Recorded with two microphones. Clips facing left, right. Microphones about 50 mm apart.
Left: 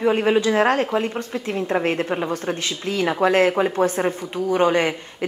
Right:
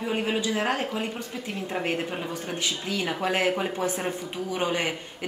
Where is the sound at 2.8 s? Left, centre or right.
Left.